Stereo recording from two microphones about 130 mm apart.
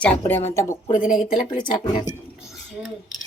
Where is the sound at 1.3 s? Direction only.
35° left (ahead or behind).